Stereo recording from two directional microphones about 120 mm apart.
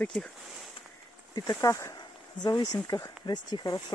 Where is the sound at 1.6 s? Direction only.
30° left (ahead or behind).